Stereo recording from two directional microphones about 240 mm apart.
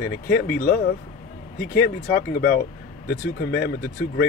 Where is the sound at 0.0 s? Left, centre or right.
Left.